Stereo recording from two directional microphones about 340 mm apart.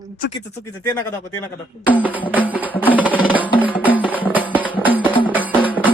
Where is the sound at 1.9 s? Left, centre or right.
Centre.